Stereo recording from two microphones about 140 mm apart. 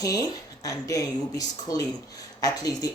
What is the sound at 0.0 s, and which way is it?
Speech, 25° left (ahead or behind).